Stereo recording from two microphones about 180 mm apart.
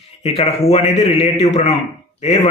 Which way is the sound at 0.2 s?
35° left (ahead or behind).